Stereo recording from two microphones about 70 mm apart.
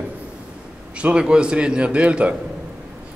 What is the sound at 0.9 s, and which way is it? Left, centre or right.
A man's voice, centre.